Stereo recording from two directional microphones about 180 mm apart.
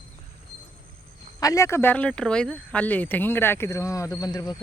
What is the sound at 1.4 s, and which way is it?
Speech, 15° left (ahead or behind).